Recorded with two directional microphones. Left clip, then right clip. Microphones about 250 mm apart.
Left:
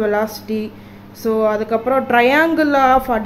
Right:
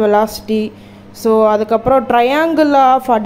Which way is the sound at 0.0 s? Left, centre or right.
Centre.